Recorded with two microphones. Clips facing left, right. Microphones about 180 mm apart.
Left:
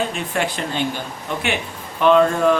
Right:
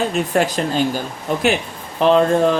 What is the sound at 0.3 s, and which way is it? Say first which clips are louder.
A man's voice: right 4 dB; 40° right (ahead or behind).